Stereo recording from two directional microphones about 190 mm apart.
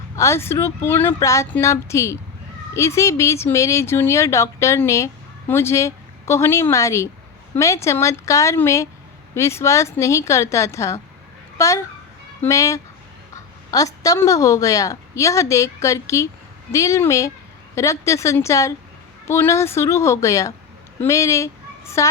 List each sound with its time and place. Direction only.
0.2 s a woman's voice: 15° left (ahead or behind)